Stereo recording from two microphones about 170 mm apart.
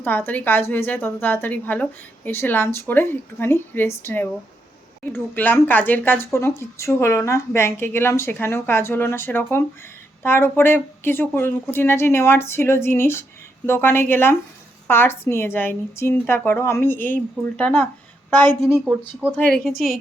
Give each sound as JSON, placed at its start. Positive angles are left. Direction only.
{"t": 0.0, "sound": "speech", "side_deg": 10}
{"t": 18.7, "sound": "speech", "side_deg": -10}
{"t": 19.7, "sound": "a woman's voice", "side_deg": 55}